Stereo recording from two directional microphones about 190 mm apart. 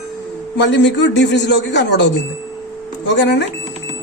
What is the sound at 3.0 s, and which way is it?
Speech, 70° left (ahead or behind).